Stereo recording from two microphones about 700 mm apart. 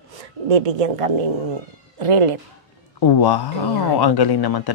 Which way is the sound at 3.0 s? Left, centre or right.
Left.